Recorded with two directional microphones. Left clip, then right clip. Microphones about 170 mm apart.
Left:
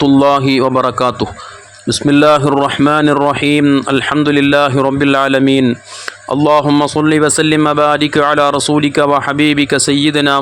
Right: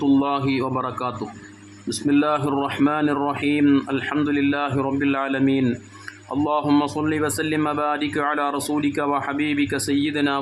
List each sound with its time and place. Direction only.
0.0 s speech: 45° left (ahead or behind)